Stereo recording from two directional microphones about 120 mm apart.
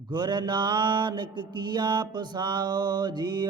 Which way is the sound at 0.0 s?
40° right (ahead or behind).